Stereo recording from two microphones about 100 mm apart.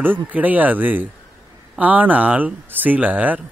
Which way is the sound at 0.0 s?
20° right (ahead or behind).